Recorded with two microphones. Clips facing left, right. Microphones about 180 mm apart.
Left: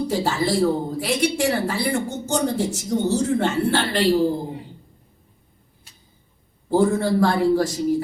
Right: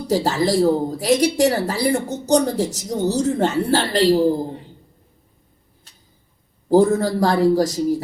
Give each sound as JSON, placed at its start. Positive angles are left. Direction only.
{"t": 0.1, "sound": "speech", "side_deg": -40}
{"t": 6.7, "sound": "speech", "side_deg": -40}